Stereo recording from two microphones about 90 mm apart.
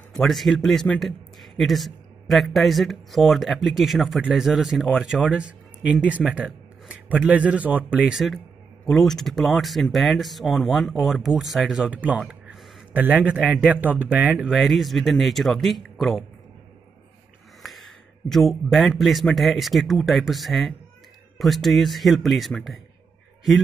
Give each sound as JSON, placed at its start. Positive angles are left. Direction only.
{"t": 0.1, "sound": "a man's voice", "side_deg": 5}
{"t": 8.1, "sound": "a man's voice", "side_deg": 0}
{"t": 11.9, "sound": "speech", "side_deg": -15}
{"t": 12.2, "sound": "a sound", "side_deg": -10}
{"t": 13.0, "sound": "speech", "side_deg": -15}
{"t": 14.5, "sound": "a man's voice", "side_deg": 0}
{"t": 17.6, "sound": "a man's voice", "side_deg": 0}